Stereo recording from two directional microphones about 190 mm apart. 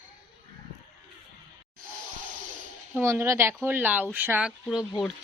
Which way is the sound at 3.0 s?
15° right (ahead or behind).